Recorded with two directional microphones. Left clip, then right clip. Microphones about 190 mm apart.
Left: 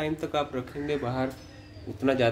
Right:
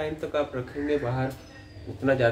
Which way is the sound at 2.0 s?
45° left (ahead or behind).